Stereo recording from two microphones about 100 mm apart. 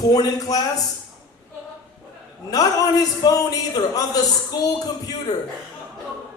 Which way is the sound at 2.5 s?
35° left (ahead or behind).